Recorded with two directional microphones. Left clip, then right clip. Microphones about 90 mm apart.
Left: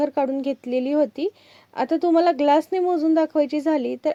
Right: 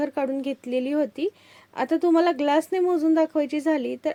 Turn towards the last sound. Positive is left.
turn(degrees=25)  # may be behind; listen again after turning